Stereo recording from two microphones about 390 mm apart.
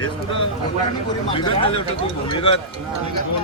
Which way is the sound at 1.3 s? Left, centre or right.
Centre.